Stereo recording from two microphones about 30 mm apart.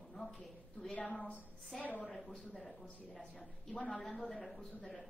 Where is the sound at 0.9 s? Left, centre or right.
Left.